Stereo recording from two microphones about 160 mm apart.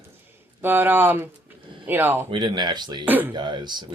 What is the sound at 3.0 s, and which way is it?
Speech, 10° right (ahead or behind).